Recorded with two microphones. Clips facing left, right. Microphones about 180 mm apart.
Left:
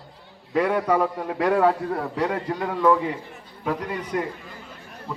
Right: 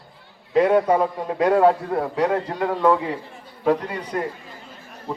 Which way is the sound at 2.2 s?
40° right (ahead or behind).